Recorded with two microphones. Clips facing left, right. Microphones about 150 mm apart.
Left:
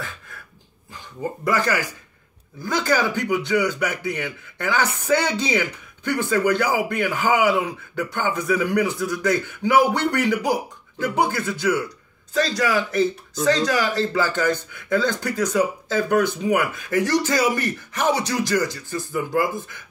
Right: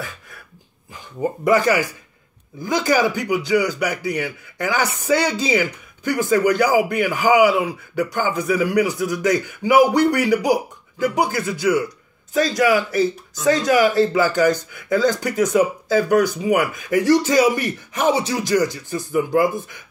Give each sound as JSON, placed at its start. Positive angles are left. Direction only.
{"t": 1.4, "sound": "speech", "side_deg": -15}